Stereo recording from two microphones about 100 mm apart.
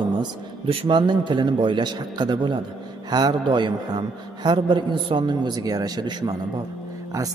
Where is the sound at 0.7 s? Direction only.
55° right (ahead or behind).